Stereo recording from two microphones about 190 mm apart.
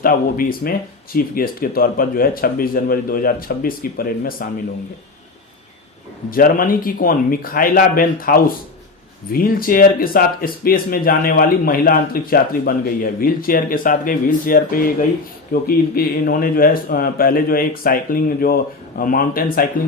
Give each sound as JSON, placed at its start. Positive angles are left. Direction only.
{"t": 0.0, "sound": "speech", "side_deg": 50}
{"t": 6.3, "sound": "speech", "side_deg": 45}